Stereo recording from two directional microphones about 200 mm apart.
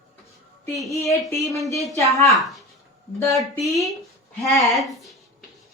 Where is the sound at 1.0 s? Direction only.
15° left (ahead or behind).